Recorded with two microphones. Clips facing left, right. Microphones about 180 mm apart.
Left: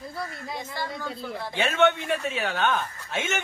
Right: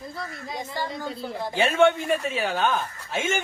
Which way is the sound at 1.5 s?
35° right (ahead or behind).